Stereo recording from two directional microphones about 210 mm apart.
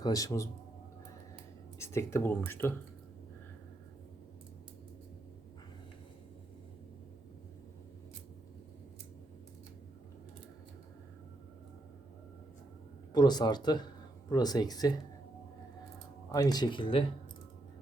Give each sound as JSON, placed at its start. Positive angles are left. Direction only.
{"t": 0.0, "sound": "speech", "side_deg": 15}
{"t": 1.8, "sound": "speech", "side_deg": 10}
{"t": 13.1, "sound": "speech", "side_deg": 20}
{"t": 16.3, "sound": "speech", "side_deg": 20}